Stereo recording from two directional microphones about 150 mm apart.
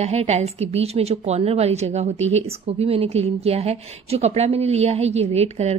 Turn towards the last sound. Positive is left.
turn(degrees=-45)  # may be behind; listen again after turning